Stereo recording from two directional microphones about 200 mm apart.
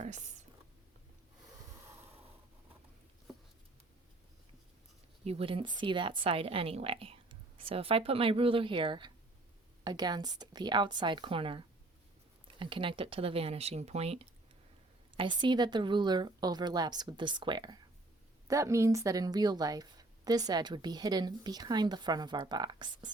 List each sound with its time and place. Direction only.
0.0 s speech: 35° right (ahead or behind)
5.2 s a woman's voice: 30° right (ahead or behind)